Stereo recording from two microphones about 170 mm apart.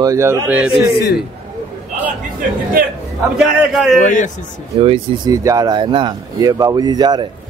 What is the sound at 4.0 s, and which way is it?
Speech, 45° left (ahead or behind).